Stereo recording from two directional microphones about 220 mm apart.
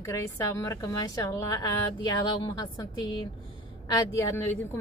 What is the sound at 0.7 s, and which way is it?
A woman's voice, 15° left (ahead or behind).